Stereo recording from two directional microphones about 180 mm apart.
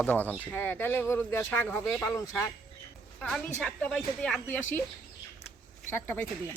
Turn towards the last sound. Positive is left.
turn(degrees=15)  # may be behind; listen again after turning